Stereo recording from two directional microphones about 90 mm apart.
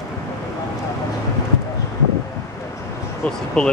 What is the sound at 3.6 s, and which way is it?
Speech, 5° left (ahead or behind).